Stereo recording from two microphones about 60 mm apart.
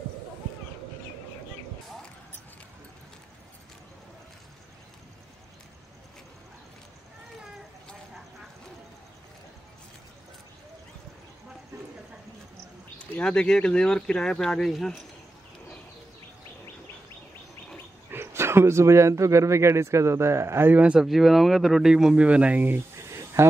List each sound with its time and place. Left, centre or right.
13.2 s speech: centre
18.1 s a man's voice: right
20.6 s speech: right
20.9 s speech: centre
22.1 s speech: right